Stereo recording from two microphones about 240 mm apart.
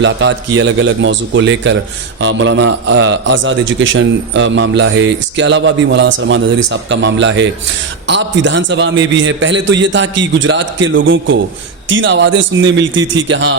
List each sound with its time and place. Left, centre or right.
0.0 s a man's voice: right